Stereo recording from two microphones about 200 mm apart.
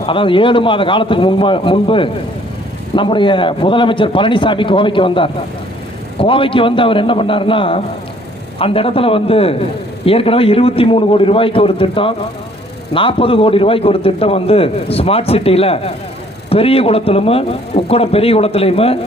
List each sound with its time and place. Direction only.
0.0 s a man's voice: 25° left (ahead or behind)